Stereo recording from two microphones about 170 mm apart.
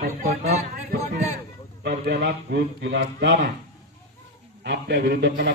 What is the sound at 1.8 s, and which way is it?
A man's voice, 85° right.